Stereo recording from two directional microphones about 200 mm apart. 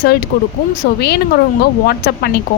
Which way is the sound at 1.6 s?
55° left (ahead or behind).